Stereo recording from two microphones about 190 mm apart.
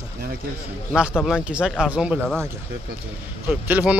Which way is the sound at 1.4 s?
5° right (ahead or behind).